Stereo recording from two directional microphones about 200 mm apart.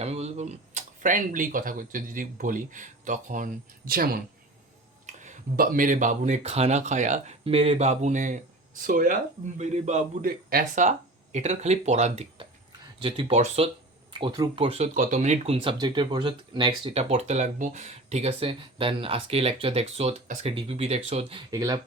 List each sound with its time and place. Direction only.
0.0 s speech: 35° right (ahead or behind); by 4.2 s 50° right (ahead or behind)
5.0 s speech: 40° right (ahead or behind)
21.5 s speech: 15° right (ahead or behind)